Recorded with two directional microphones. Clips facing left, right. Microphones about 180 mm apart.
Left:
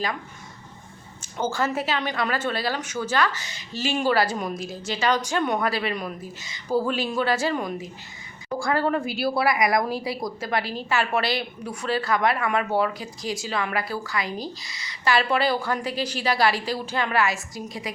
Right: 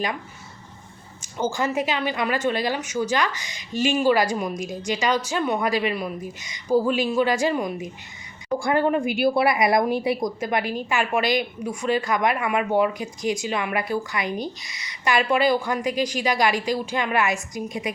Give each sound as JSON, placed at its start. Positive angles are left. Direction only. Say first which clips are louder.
{"t": 1.4, "sound": "a woman's voice", "louder": "right 2 dB", "side_deg": -10}